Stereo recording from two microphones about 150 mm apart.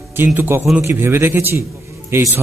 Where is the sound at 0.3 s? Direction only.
15° right (ahead or behind).